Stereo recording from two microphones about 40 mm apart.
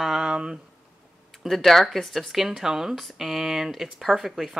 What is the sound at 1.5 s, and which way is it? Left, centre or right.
Speech, centre.